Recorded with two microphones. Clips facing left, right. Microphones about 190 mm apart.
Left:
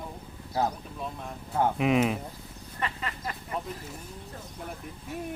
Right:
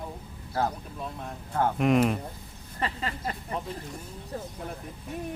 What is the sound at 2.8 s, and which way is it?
Speech, 35° right (ahead or behind).